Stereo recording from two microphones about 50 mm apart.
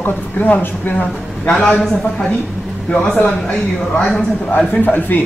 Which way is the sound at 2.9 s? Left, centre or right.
Left.